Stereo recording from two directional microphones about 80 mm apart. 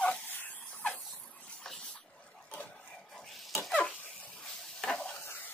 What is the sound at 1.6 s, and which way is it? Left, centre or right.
Dog, centre.